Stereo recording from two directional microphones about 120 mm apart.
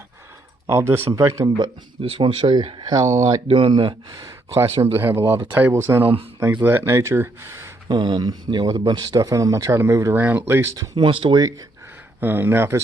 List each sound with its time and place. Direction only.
0.7 s speech: 20° right (ahead or behind)
1.5 s speech: 45° right (ahead or behind)
2.9 s speech: 25° right (ahead or behind)
3.4 s speech: 45° right (ahead or behind)
4.1 s speech: 30° right (ahead or behind)
4.9 s speech: 20° right (ahead or behind)
7.9 s speech: 40° right (ahead or behind); by 10.7 s 20° right (ahead or behind)
10.8 s speech: 45° right (ahead or behind)
12.2 s speech: 15° right (ahead or behind)